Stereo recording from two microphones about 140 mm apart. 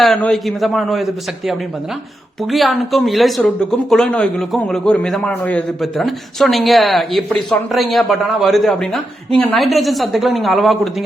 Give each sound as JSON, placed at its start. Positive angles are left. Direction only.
{"t": 0.0, "sound": "speech", "side_deg": 5}
{"t": 2.4, "sound": "speech", "side_deg": 0}